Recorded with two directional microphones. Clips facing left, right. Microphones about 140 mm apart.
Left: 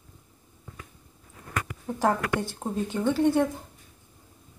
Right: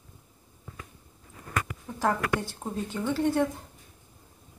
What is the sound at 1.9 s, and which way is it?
Speech, 35° left (ahead or behind).